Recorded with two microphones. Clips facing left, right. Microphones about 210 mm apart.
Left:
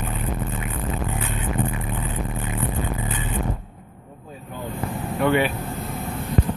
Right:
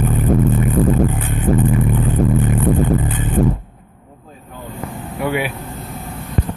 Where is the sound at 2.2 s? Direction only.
65° right (ahead or behind).